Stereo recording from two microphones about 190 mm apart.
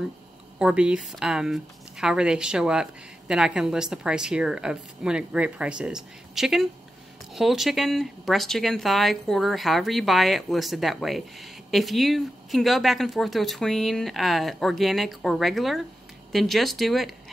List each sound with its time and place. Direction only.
0.6 s speech: 5° right (ahead or behind)